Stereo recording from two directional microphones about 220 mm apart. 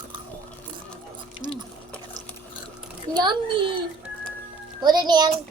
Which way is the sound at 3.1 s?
20° right (ahead or behind).